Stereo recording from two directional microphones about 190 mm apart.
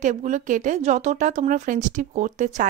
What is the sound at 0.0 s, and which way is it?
Speech, 40° right (ahead or behind).